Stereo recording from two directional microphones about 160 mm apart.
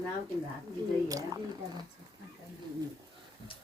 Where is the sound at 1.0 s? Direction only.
20° right (ahead or behind).